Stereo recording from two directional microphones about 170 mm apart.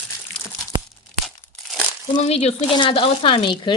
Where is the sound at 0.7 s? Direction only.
25° right (ahead or behind).